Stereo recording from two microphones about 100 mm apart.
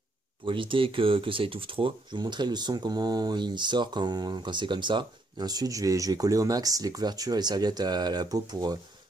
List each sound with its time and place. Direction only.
0.5 s speech: 60° right (ahead or behind); by 8.7 s 40° right (ahead or behind)